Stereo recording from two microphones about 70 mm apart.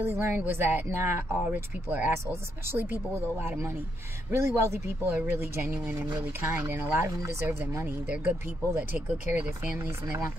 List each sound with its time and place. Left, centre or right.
0.0 s speech: right
4.3 s speech: right
8.1 s speech: right
9.8 s speech: right